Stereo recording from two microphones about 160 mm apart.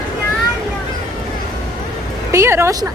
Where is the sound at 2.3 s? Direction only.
15° right (ahead or behind).